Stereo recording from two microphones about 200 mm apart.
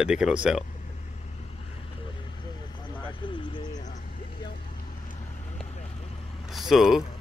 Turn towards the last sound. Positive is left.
turn(degrees=0)  # may be behind; listen again after turning